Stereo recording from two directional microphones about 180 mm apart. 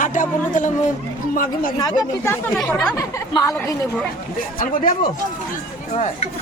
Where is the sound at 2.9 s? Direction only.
20° left (ahead or behind).